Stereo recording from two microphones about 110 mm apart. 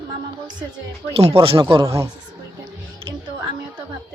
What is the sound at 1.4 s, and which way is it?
Speech, 50° right (ahead or behind).